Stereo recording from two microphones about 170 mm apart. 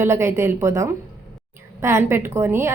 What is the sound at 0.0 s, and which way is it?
A woman's voice, 15° right (ahead or behind).